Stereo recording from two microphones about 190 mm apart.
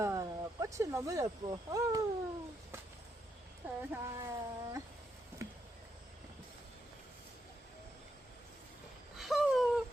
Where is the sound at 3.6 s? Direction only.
10° right (ahead or behind).